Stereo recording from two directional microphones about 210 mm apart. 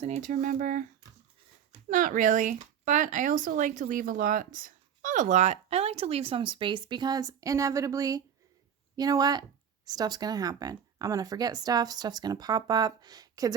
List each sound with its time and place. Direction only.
0.0 s speech: 35° right (ahead or behind)
1.9 s speech: 40° right (ahead or behind); by 13.5 s 15° right (ahead or behind)